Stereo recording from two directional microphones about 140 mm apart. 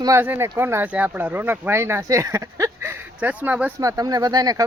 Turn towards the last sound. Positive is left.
turn(degrees=-30)  # may be behind; listen again after turning